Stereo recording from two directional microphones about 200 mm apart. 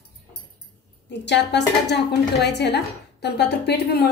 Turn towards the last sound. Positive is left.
turn(degrees=55)  # may be behind; listen again after turning